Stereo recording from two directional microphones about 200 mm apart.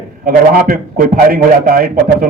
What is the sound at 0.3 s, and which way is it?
A man's voice, 45° right (ahead or behind).